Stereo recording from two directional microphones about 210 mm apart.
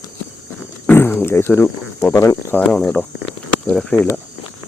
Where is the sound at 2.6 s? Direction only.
Centre (ahead or behind).